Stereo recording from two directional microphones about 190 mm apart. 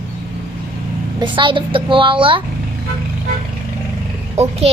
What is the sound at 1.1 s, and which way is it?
Speech, 25° right (ahead or behind).